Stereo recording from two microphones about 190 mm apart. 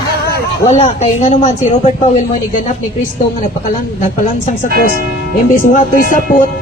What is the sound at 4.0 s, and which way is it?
Speech, 40° left (ahead or behind).